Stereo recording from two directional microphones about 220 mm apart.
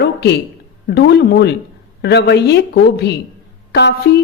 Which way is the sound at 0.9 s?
50° left (ahead or behind).